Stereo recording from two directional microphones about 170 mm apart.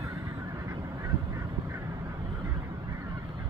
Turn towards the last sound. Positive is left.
turn(degrees=-15)  # may be behind; listen again after turning